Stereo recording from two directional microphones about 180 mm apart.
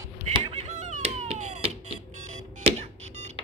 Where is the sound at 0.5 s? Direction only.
40° right (ahead or behind).